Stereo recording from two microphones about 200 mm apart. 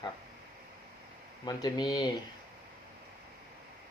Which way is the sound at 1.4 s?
20° left (ahead or behind).